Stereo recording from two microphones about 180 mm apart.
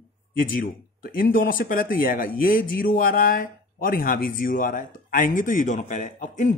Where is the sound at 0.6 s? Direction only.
55° left (ahead or behind).